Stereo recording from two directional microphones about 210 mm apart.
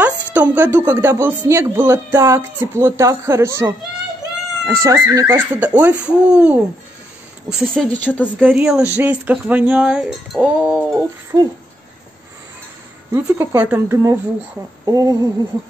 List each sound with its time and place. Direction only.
0.0 s a woman's voice: 10° right (ahead or behind)
7.5 s a woman's voice: 5° left (ahead or behind)
8.5 s speech: 5° right (ahead or behind)
11.3 s a sound: 20° right (ahead or behind)
13.1 s a woman's voice: 10° right (ahead or behind)